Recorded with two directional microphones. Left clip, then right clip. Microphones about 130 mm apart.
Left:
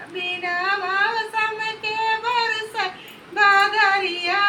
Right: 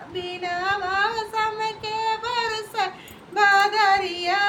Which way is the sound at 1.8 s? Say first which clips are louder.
Left 6 dB; 45° right (ahead or behind).